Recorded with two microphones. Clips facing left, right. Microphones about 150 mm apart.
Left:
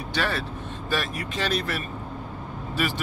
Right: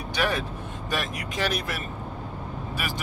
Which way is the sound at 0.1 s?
15° right (ahead or behind).